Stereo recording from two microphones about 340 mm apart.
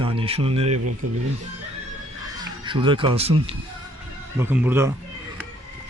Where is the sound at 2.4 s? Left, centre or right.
Centre.